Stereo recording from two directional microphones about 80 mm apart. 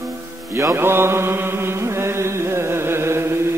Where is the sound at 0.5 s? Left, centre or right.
Right.